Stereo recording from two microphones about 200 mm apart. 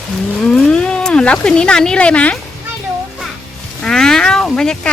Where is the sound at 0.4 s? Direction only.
5° left (ahead or behind).